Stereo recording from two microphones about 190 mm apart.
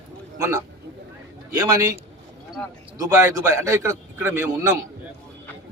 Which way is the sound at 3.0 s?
15° right (ahead or behind).